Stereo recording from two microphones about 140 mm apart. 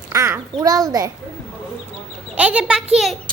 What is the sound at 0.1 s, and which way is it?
A child's voice, 20° right (ahead or behind).